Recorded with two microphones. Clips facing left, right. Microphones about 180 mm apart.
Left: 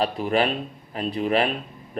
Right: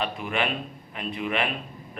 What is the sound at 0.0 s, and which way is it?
A man's voice, 35° left (ahead or behind).